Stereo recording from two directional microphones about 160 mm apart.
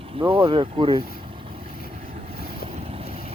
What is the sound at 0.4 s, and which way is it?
Speech, 35° right (ahead or behind).